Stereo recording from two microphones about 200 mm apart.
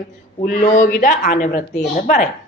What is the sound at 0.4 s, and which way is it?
A woman's voice, 40° left (ahead or behind).